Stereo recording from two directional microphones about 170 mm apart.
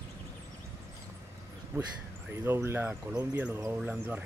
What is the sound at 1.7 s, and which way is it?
Speech, 15° right (ahead or behind).